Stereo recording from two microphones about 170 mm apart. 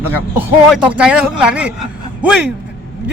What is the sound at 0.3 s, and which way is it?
Speech, 10° right (ahead or behind).